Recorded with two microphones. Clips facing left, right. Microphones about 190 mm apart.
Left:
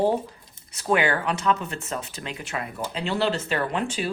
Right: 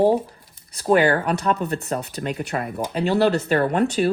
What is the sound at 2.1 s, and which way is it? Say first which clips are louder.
Speech: right 8 dB; 55° right (ahead or behind).